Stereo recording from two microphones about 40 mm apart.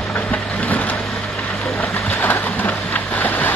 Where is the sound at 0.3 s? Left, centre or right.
Left.